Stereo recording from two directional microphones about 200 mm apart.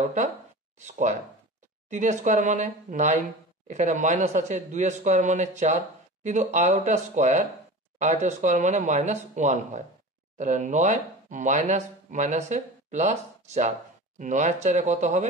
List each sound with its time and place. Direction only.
0.7 s speech: 35° right (ahead or behind)